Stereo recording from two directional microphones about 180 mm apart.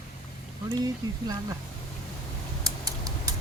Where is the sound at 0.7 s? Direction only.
20° right (ahead or behind).